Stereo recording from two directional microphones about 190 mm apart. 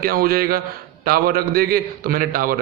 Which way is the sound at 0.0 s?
50° right (ahead or behind).